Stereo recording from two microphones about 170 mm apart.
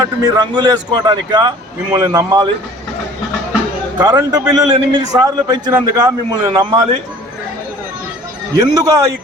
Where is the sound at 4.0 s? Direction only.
20° right (ahead or behind).